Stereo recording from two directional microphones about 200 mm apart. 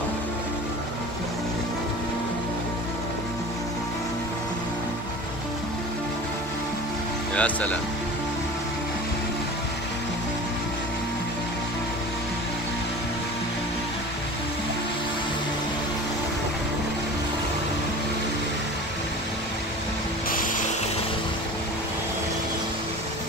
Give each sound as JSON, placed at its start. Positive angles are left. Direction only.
{"t": 7.3, "sound": "speech", "side_deg": 5}
{"t": 20.2, "sound": "music", "side_deg": 45}